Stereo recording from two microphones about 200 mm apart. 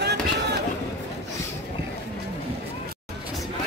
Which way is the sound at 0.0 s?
55° right (ahead or behind).